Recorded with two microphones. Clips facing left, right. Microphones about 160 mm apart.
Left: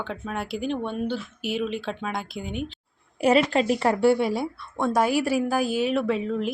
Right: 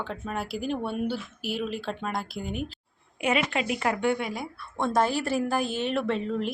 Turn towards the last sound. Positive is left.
turn(degrees=0)  # may be behind; listen again after turning